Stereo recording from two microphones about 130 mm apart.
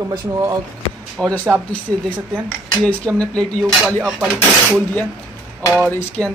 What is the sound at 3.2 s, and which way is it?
Speech, 5° left (ahead or behind).